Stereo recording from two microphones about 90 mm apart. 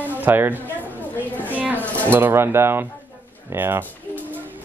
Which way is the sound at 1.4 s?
20° right (ahead or behind).